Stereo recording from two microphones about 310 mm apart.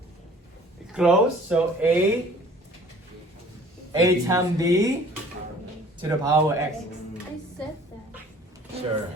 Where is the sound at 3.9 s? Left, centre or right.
Centre.